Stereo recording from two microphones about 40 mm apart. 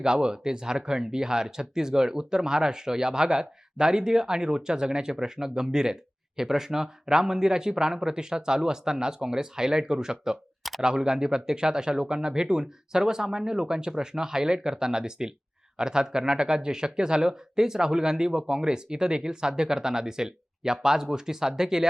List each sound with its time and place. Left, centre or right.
0.0 s speech: centre
10.6 s a sound: centre
10.8 s speech: centre